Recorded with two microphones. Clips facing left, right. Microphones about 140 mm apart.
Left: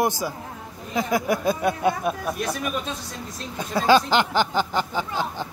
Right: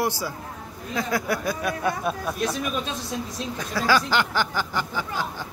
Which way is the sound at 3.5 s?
20° left (ahead or behind).